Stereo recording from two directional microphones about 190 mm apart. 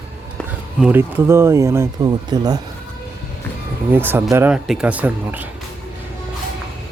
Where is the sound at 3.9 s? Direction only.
10° right (ahead or behind).